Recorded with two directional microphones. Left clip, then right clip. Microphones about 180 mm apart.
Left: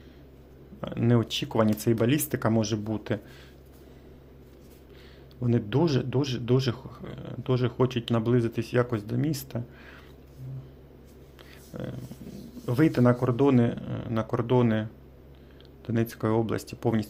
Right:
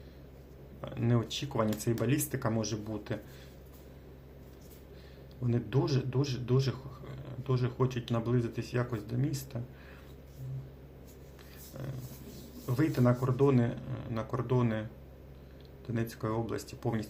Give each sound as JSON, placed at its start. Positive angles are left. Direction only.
{"t": 0.8, "sound": "speech", "side_deg": 45}
{"t": 5.4, "sound": "speech", "side_deg": 45}
{"t": 11.7, "sound": "speech", "side_deg": 50}
{"t": 15.9, "sound": "speech", "side_deg": 50}